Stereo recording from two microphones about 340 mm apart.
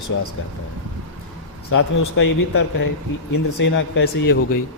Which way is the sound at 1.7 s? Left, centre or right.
Left.